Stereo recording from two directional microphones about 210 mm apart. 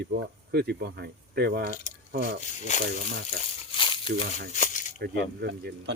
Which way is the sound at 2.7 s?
35° left (ahead or behind).